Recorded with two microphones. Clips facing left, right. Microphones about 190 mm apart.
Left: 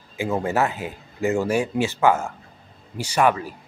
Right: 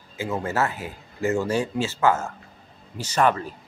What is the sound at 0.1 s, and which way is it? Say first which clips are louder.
Speech: left 4 dB; 15° left (ahead or behind).